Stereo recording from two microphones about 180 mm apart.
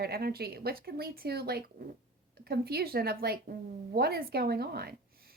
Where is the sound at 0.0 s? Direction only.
60° right (ahead or behind).